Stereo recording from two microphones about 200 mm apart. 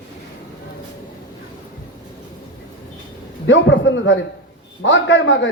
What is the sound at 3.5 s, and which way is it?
A man's voice, 65° left (ahead or behind).